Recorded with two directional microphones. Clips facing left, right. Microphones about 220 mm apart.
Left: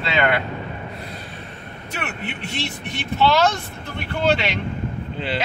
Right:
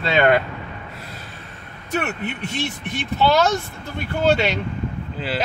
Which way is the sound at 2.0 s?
45° right (ahead or behind).